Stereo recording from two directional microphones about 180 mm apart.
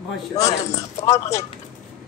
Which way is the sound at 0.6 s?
15° left (ahead or behind).